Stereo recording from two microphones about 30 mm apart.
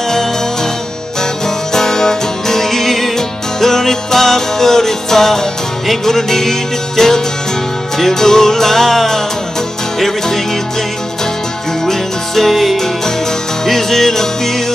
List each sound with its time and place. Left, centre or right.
1.7 s music: centre
11.8 s music: centre
13.7 s music: centre